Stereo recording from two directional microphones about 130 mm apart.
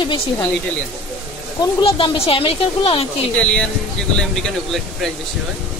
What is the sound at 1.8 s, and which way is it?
Speech, 45° left (ahead or behind).